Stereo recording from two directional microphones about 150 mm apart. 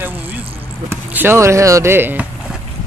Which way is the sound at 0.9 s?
15° right (ahead or behind).